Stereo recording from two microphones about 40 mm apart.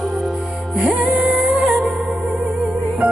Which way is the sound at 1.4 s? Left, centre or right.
Right.